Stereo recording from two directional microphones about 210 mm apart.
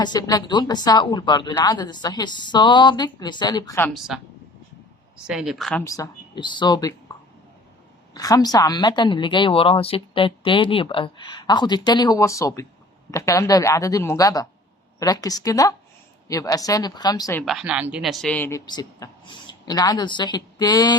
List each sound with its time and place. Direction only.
0.0 s a woman's voice: 20° left (ahead or behind)
3.9 s speech: centre (ahead or behind)
5.2 s speech: 5° right (ahead or behind)
5.8 s a woman's voice: 15° left (ahead or behind)
8.1 s a woman's voice: 15° left (ahead or behind)
17.4 s speech: centre (ahead or behind); by 20.9 s 20° left (ahead or behind)